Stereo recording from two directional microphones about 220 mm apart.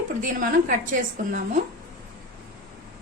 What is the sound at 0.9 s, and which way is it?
Speech, 35° right (ahead or behind).